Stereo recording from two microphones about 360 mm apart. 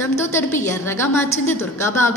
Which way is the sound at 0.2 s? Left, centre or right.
Centre.